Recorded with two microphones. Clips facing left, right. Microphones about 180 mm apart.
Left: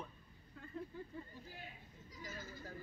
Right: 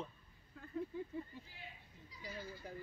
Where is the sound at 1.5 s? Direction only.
45° left (ahead or behind).